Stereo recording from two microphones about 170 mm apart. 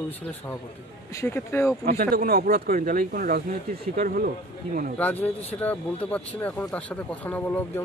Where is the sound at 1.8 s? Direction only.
60° right (ahead or behind).